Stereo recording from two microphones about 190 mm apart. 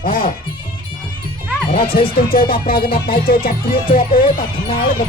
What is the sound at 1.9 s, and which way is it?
Music, 55° left (ahead or behind).